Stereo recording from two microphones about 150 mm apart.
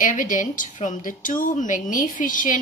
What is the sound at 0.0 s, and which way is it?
A woman's voice, 60° left (ahead or behind).